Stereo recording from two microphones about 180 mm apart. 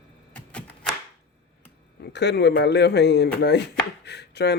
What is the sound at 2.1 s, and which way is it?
Speech, 70° left (ahead or behind).